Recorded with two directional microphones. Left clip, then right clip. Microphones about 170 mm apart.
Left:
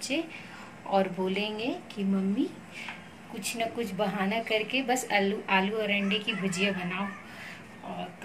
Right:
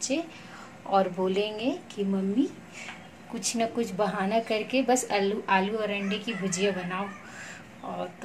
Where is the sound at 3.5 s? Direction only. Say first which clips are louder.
Right 3 dB; 45° right (ahead or behind).